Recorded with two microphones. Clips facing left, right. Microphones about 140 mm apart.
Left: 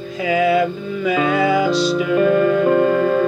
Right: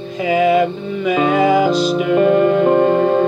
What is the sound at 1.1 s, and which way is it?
Music, 25° right (ahead or behind).